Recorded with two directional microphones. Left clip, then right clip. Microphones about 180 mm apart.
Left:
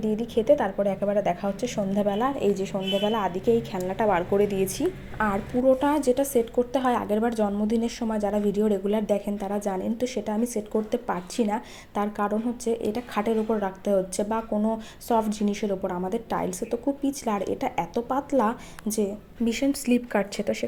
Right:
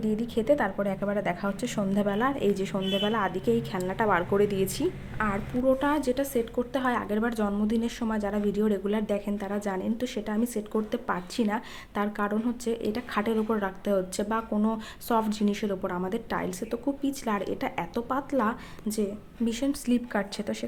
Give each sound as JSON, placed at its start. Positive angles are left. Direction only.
{"t": 0.2, "sound": "speech", "side_deg": 0}
{"t": 5.1, "sound": "a woman's voice", "side_deg": 15}